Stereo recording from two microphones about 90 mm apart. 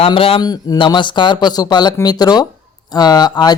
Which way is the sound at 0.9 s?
60° left (ahead or behind).